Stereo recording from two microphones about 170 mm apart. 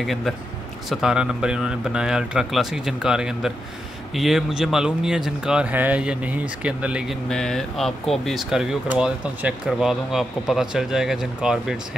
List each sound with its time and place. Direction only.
0.0 s speech: centre (ahead or behind)
7.2 s speech: 5° left (ahead or behind)